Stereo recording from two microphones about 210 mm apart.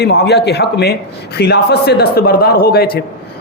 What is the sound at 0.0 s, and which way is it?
A man's voice, 50° left (ahead or behind).